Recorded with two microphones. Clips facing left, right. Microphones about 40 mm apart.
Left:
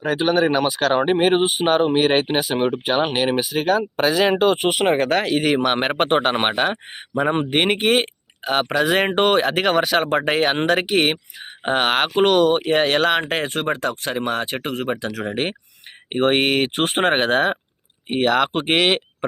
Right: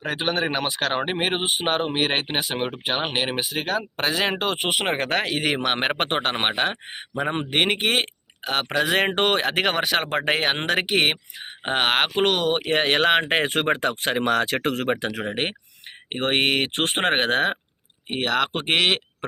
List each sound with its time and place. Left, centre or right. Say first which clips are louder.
0.0 s speech: left 6 dB; centre
13.5 s speech: even; right
14.2 s speech: right 2 dB; right
15.2 s speech: left 3 dB; centre